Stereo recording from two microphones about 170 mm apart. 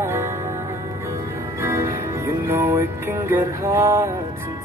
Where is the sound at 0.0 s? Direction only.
15° right (ahead or behind).